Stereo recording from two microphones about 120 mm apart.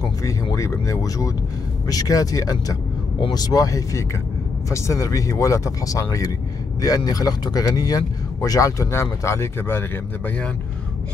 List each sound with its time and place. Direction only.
0.2 s speech: 25° left (ahead or behind)